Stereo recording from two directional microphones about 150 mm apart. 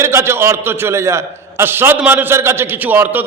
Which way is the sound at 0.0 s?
20° right (ahead or behind).